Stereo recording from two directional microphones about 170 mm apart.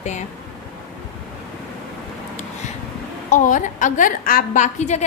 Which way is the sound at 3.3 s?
50° left (ahead or behind).